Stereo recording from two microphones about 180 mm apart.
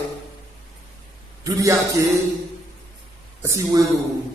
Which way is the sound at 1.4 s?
20° right (ahead or behind).